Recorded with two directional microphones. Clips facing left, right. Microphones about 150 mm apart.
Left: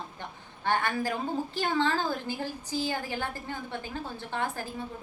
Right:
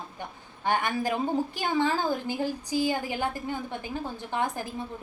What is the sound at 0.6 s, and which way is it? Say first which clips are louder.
A woman's voice: right 2 dB; 15° right (ahead or behind).